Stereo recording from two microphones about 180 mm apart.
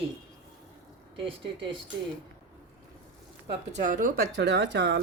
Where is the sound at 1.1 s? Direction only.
30° right (ahead or behind).